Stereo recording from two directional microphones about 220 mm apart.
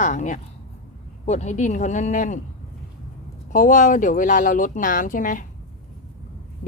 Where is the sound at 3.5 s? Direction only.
35° left (ahead or behind).